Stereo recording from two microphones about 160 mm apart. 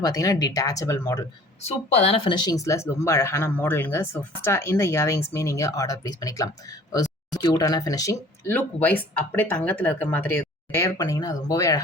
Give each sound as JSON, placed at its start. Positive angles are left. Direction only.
{"t": 0.0, "sound": "speech", "side_deg": 20}
{"t": 1.6, "sound": "speech", "side_deg": 40}
{"t": 8.4, "sound": "speech", "side_deg": 10}